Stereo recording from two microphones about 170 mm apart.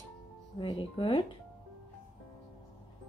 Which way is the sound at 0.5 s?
30° left (ahead or behind).